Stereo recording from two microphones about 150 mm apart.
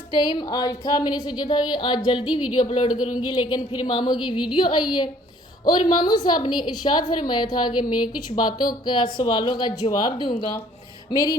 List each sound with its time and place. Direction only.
0.2 s a woman's voice: 30° left (ahead or behind)